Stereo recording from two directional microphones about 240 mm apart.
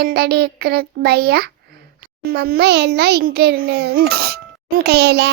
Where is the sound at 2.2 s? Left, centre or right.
Right.